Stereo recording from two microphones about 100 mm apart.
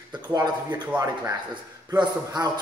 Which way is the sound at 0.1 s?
45° right (ahead or behind).